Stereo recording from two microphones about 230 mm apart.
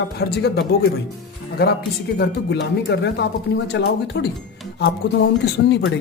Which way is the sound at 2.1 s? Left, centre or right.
Left.